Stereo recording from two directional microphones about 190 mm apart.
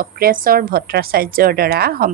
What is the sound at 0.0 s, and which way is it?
A woman's voice, 50° right (ahead or behind).